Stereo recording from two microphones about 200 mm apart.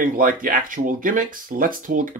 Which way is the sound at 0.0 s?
45° right (ahead or behind).